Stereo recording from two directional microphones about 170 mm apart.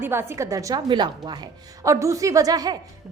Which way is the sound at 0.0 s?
15° right (ahead or behind).